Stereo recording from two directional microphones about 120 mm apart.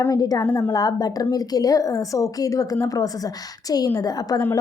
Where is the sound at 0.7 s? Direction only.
30° left (ahead or behind).